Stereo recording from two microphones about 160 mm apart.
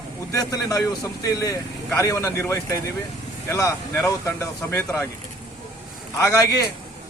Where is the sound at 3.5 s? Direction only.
20° left (ahead or behind).